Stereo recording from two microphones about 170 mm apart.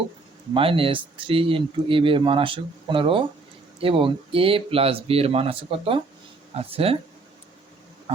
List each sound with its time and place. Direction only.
0.5 s speech: 30° right (ahead or behind)